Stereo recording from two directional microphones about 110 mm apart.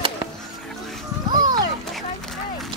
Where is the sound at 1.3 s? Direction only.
40° right (ahead or behind).